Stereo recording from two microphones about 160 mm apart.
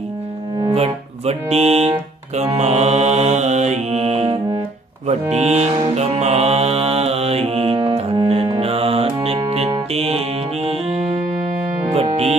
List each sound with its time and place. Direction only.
0.7 s speech: 40° right (ahead or behind)
5.0 s music: 40° right (ahead or behind)
11.9 s music: 40° right (ahead or behind)